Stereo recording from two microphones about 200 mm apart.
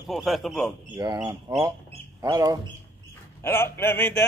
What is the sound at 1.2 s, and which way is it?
Speech, 15° right (ahead or behind).